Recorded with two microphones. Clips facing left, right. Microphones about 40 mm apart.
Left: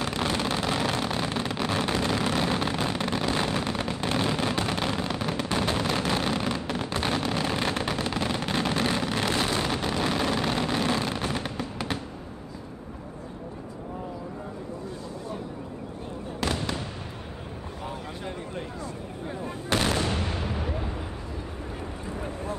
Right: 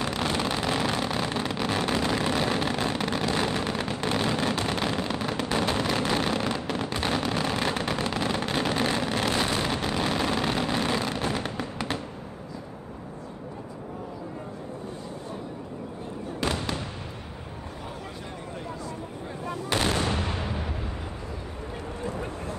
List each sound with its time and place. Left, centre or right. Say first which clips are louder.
0.0 s vehicle: even; centre
3.7 s a sound: even; centre
8.1 s vehicle: right 1 dB; centre
16.3 s fireworks: even; centre
19.7 s artillery fire: left 1 dB; centre
20.1 s artillery fire: right 1 dB; right